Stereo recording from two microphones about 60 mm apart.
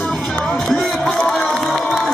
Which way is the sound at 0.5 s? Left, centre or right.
Centre.